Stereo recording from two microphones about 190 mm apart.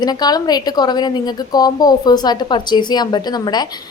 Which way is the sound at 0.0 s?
20° left (ahead or behind).